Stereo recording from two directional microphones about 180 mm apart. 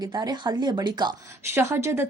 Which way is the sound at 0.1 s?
25° right (ahead or behind).